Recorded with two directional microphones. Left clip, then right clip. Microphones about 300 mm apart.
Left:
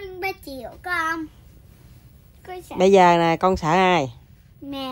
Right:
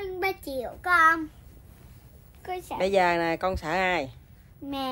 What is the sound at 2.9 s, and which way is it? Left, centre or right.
Speech, left.